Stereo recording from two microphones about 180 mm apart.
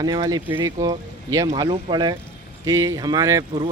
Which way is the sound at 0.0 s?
20° right (ahead or behind).